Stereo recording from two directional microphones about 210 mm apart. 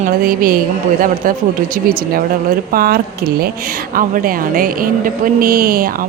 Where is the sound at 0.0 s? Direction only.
45° right (ahead or behind).